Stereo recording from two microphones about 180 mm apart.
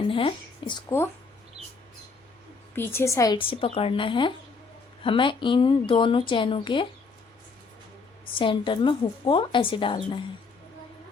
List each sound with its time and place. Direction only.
0.1 s a woman's voice: 30° left (ahead or behind)
0.9 s a woman's voice: 15° left (ahead or behind)
2.7 s a woman's voice: 10° left (ahead or behind)
8.4 s a woman's voice: 30° left (ahead or behind)